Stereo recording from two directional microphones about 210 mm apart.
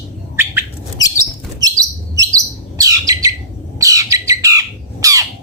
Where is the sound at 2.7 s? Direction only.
15° right (ahead or behind).